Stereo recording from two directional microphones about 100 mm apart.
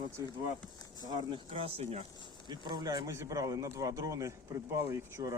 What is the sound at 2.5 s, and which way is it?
Speech, 45° right (ahead or behind).